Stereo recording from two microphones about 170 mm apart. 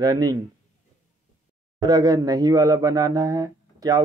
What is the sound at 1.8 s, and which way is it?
Speech, 25° right (ahead or behind).